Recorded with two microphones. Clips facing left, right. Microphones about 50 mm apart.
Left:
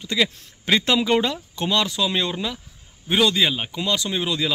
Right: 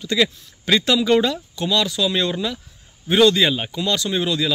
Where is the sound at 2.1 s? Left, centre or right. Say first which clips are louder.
Right 3 dB; centre.